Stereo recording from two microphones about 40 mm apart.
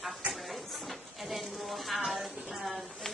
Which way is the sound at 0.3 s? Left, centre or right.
Centre.